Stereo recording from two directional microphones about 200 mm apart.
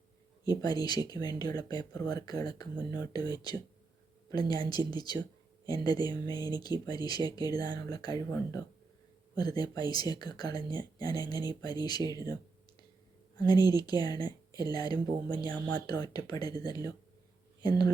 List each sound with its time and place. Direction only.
0.6 s speech: 20° left (ahead or behind)